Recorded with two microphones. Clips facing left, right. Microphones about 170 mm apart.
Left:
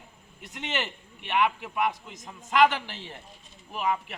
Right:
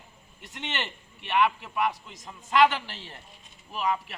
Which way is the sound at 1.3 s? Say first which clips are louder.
Right 1 dB; 15° left (ahead or behind).